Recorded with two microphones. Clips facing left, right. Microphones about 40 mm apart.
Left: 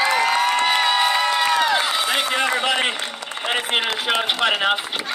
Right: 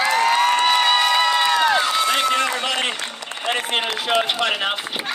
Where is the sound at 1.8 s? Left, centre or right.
Centre.